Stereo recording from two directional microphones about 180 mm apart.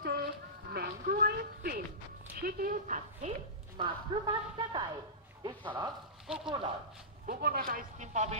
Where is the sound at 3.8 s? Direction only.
25° right (ahead or behind).